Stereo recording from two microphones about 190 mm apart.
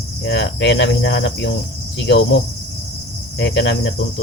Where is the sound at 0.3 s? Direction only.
65° left (ahead or behind).